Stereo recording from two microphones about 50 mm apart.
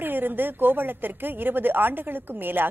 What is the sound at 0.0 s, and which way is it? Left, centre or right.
A woman's voice, right.